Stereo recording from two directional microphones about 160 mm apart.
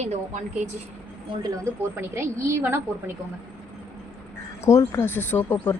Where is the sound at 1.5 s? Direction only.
15° right (ahead or behind).